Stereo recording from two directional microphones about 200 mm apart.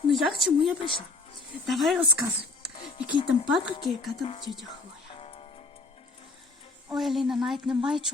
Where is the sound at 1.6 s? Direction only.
Centre (ahead or behind).